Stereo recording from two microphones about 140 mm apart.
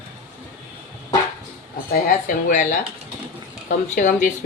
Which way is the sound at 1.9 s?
70° left (ahead or behind).